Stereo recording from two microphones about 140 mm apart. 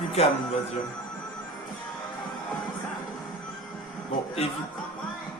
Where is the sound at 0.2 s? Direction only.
45° left (ahead or behind).